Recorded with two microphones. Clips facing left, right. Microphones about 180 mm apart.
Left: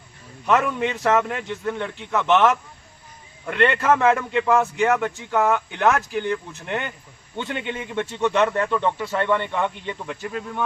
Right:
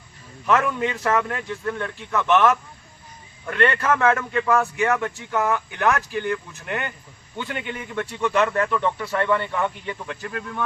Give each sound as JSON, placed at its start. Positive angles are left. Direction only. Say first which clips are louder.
{"t": 0.8, "sound": "a man's voice", "louder": "left 2 dB", "side_deg": 20}